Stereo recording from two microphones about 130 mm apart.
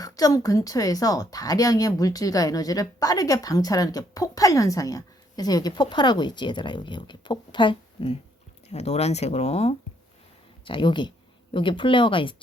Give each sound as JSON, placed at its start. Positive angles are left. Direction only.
{"t": 0.0, "sound": "a woman's voice", "side_deg": 25}
{"t": 8.7, "sound": "speech", "side_deg": 55}
{"t": 10.7, "sound": "speech", "side_deg": 40}